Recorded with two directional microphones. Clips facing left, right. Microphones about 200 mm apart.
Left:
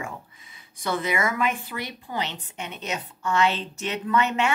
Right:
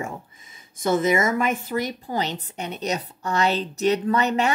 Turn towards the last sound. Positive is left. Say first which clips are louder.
# right 2 dB
turn(degrees=-40)  # may be behind; listen again after turning